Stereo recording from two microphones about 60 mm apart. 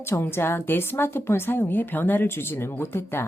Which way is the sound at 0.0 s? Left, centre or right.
Left.